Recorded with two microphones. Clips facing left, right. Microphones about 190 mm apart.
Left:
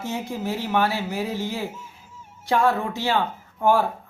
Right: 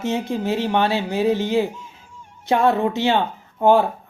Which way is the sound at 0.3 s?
25° right (ahead or behind).